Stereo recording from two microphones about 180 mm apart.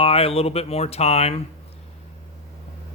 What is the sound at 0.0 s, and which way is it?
Speech, 30° left (ahead or behind).